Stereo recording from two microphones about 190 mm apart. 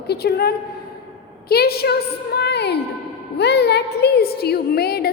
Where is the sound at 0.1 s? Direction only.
55° left (ahead or behind).